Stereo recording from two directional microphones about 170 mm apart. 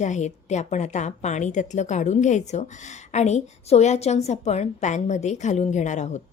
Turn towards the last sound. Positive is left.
turn(degrees=45)  # may be behind; listen again after turning